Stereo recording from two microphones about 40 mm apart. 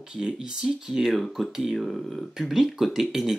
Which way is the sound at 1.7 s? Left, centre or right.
Centre.